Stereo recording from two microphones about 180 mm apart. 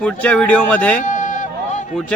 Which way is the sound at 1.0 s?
45° left (ahead or behind).